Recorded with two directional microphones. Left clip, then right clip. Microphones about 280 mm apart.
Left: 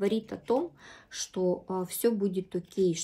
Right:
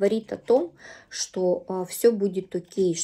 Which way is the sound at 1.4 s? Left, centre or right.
Right.